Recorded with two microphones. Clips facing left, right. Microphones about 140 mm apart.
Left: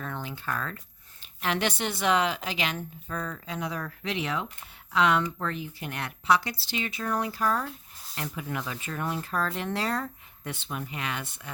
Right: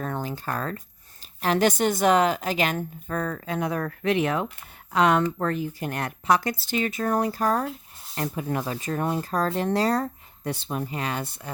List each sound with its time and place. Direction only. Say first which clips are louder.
0.0 s a woman's voice: right 6 dB; 40° right (ahead or behind)